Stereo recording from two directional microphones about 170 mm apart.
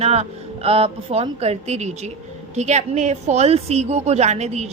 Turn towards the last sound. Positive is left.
turn(degrees=-40)  # may be behind; listen again after turning